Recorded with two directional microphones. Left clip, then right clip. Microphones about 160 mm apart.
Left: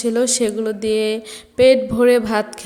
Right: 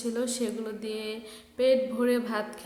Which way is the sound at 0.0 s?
45° left (ahead or behind).